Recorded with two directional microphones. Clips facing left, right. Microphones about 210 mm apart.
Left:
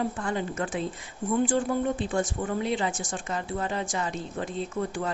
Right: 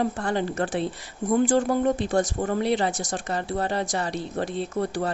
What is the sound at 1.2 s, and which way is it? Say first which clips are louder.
Speech: right 4 dB; 40° right (ahead or behind).